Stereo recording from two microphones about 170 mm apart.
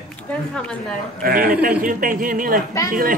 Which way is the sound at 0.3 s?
5° left (ahead or behind).